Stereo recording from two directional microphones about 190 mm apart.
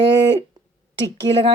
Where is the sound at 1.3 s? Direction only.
25° right (ahead or behind).